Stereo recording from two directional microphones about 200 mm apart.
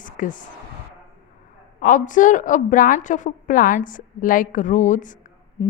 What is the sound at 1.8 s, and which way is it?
A woman's voice, 40° left (ahead or behind).